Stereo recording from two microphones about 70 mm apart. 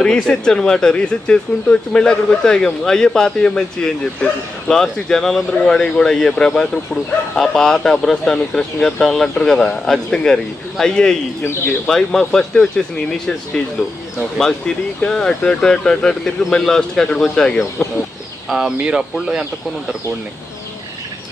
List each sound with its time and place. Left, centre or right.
0.0 s speech: centre
15.0 s speech: centre
18.8 s speech: centre